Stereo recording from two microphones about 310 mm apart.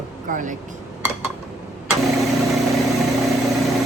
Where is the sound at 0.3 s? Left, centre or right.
Right.